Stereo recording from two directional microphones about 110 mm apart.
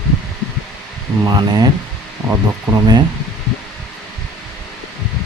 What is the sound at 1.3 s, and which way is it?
Speech, 40° right (ahead or behind).